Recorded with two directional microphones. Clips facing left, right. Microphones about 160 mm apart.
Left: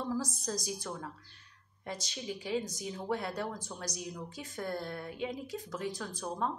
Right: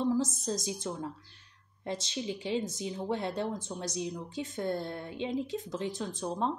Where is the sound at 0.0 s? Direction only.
20° right (ahead or behind).